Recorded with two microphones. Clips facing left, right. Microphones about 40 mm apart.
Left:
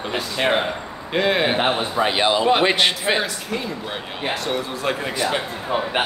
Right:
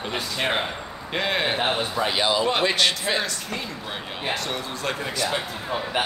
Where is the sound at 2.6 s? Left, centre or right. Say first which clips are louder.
Left 3 dB; left.